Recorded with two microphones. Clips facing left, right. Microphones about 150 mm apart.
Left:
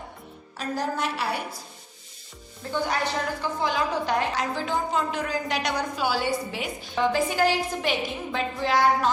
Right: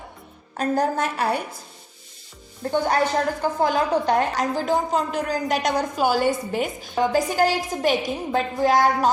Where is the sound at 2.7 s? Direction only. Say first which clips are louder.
Right 6 dB; 50° right (ahead or behind).